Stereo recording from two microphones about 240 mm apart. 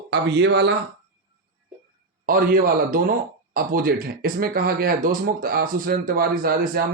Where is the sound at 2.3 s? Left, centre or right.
Right.